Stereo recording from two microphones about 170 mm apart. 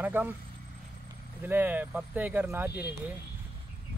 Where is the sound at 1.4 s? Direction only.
10° right (ahead or behind).